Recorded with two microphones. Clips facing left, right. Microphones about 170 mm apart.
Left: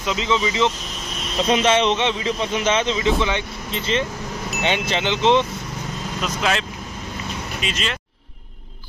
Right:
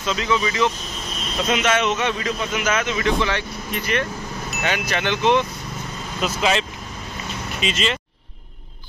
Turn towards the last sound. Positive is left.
turn(degrees=0)  # may be behind; listen again after turning